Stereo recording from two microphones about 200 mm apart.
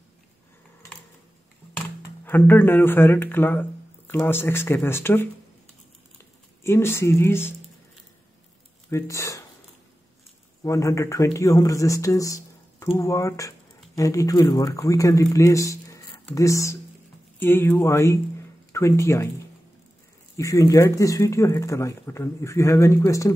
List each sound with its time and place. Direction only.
2.2 s speech: 10° left (ahead or behind)
6.6 s speech: 10° left (ahead or behind)
8.9 s speech: 15° left (ahead or behind)
10.6 s speech: 15° left (ahead or behind)
20.3 s speech: 15° left (ahead or behind)